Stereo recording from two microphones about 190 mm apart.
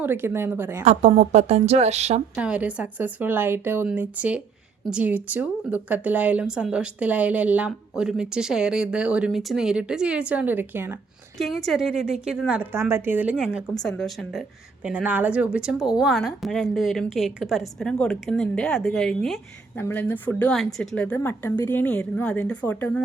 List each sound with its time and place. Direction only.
0.0 s speech: 10° right (ahead or behind)
0.9 s a woman's voice: 35° right (ahead or behind)
2.3 s speech: 5° right (ahead or behind)
11.3 s a woman's voice: centre (ahead or behind)